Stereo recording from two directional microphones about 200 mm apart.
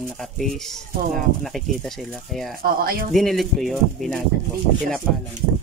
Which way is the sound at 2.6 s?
50° right (ahead or behind).